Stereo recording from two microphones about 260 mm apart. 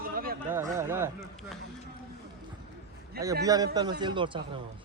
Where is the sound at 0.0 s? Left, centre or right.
Right.